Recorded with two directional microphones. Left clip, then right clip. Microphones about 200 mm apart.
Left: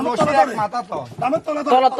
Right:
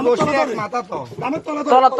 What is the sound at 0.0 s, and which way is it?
Speech, 35° left (ahead or behind).